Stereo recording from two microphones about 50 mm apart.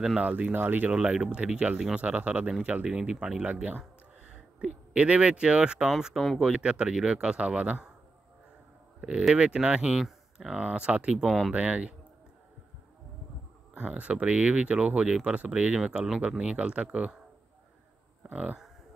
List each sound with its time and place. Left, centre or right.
0.2 s speech: right
0.9 s speech: centre
2.9 s speech: centre
5.9 s speech: centre
6.5 s speech: right
9.3 s speech: right
11.2 s speech: centre
11.5 s speech: right
13.7 s speech: right
18.3 s speech: right